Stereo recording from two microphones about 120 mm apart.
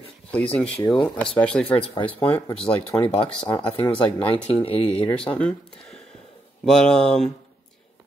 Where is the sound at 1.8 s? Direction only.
45° left (ahead or behind).